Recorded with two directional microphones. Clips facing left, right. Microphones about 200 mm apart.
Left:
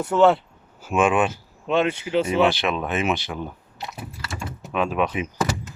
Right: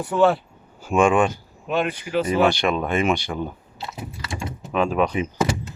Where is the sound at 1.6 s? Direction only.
25° left (ahead or behind).